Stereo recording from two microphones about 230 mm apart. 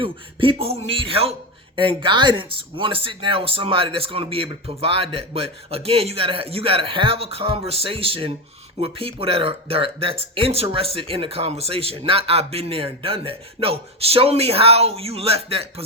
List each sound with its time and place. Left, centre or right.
0.0 s a man's voice: right